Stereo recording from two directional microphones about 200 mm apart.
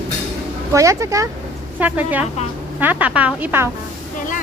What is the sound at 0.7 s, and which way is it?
Speech, 15° right (ahead or behind).